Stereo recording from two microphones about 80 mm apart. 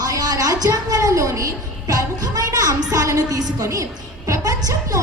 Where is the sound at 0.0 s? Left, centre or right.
Right.